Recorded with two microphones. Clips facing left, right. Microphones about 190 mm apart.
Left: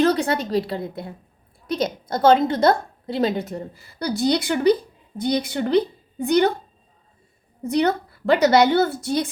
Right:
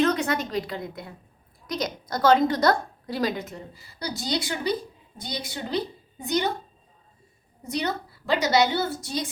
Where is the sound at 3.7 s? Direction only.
55° left (ahead or behind).